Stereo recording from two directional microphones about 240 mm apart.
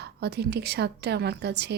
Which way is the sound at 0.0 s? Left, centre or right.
Right.